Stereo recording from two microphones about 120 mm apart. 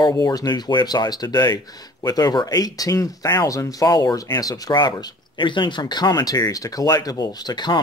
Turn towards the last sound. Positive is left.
turn(degrees=35)  # may be behind; listen again after turning